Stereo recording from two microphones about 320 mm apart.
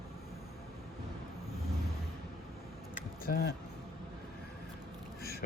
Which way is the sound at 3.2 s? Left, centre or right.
Left.